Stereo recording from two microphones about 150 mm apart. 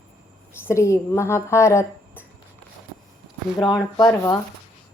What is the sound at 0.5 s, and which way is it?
A woman's voice, 15° left (ahead or behind).